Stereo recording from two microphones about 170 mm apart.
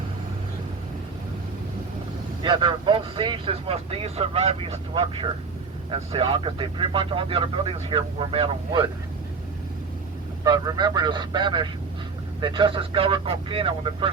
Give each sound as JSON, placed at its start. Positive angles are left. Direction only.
{"t": 2.4, "sound": "speech", "side_deg": -25}
{"t": 10.4, "sound": "speech", "side_deg": -20}